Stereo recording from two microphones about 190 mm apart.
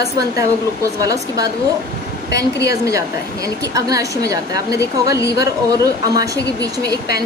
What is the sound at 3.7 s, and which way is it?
A woman's voice, 20° right (ahead or behind).